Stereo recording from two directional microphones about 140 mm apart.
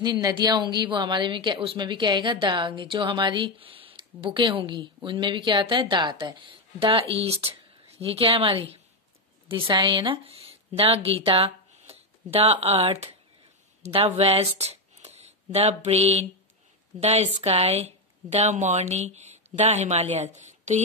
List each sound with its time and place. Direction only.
0.0 s a woman's voice: 30° right (ahead or behind); by 20.8 s 55° right (ahead or behind)